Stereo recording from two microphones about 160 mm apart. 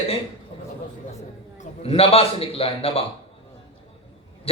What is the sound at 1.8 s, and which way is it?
A man's voice, 40° left (ahead or behind).